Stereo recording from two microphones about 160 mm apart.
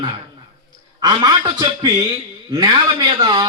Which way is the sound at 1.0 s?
30° right (ahead or behind).